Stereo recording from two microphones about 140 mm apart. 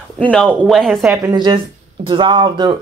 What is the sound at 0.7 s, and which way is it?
Speech, centre (ahead or behind).